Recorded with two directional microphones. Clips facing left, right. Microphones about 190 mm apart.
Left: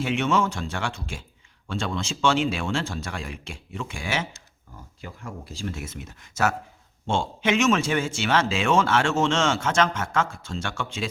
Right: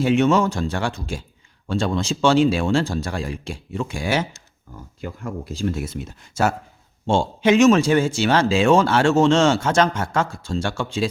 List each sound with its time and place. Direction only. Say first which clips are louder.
0.0 s a man's voice: right 7 dB; 40° right (ahead or behind)